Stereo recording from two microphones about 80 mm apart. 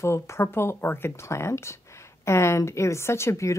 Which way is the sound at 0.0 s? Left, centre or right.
Left.